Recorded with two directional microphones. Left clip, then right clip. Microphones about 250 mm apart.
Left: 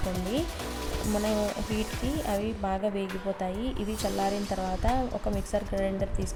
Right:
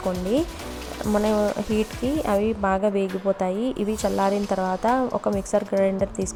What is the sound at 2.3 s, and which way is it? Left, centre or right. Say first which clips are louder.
A woman's voice: right 9 dB; centre.